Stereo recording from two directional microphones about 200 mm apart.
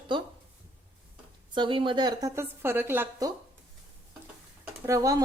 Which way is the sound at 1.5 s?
25° right (ahead or behind).